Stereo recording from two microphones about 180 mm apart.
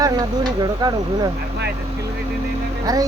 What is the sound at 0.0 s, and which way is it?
Speech, 20° right (ahead or behind).